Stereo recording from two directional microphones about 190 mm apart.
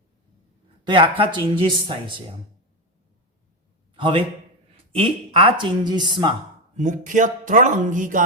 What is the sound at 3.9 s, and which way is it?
A man's voice, 25° right (ahead or behind).